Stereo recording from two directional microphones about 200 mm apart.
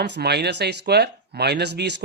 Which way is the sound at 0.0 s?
55° right (ahead or behind).